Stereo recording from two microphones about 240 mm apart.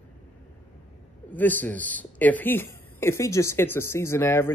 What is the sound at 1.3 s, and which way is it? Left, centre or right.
Speech, centre.